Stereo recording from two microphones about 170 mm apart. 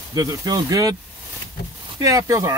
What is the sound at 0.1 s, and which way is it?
Speech, 20° right (ahead or behind).